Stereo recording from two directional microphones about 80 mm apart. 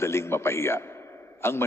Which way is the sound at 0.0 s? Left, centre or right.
Left.